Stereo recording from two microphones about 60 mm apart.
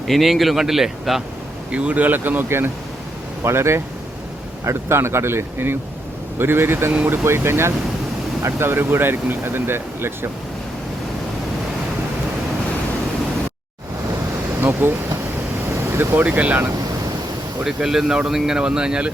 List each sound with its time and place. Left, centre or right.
0.1 s speech: centre
1.7 s speech: right
14.6 s speech: right
15.7 s vehicle: right
16.2 s speech: right
17.8 s speech: centre